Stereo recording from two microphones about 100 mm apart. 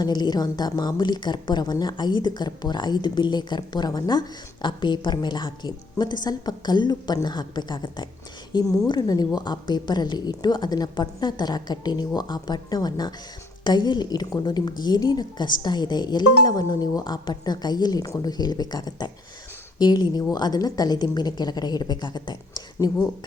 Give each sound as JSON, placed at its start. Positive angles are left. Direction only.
{"t": 0.0, "sound": "a woman's voice", "side_deg": 45}
{"t": 8.5, "sound": "a woman's voice", "side_deg": 35}